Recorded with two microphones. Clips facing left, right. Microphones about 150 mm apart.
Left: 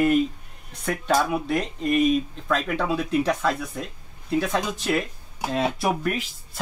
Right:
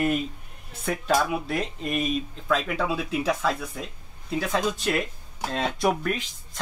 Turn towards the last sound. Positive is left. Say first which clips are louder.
# even
turn(degrees=5)  # may be behind; listen again after turning